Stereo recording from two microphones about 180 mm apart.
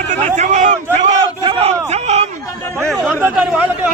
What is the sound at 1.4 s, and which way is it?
Crowd, 30° right (ahead or behind).